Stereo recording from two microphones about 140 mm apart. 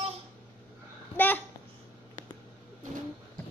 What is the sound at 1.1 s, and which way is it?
Babbling, 10° left (ahead or behind).